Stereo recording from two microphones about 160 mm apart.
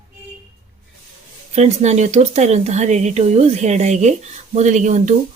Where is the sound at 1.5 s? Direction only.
45° right (ahead or behind).